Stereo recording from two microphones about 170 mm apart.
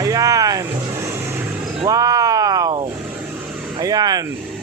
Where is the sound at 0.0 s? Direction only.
20° right (ahead or behind).